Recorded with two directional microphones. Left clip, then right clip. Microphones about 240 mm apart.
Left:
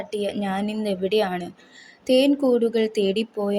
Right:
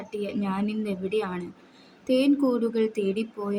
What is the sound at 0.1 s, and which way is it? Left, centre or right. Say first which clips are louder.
Speech: left 4 dB; centre.